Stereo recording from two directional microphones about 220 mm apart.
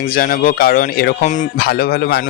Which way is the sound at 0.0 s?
40° left (ahead or behind).